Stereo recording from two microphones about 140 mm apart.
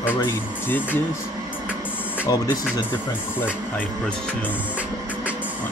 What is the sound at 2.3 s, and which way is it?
Speech, 30° left (ahead or behind).